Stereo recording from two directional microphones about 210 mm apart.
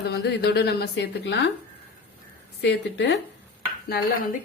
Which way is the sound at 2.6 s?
55° left (ahead or behind).